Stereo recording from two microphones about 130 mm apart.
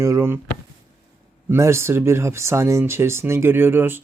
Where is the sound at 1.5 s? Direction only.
20° right (ahead or behind).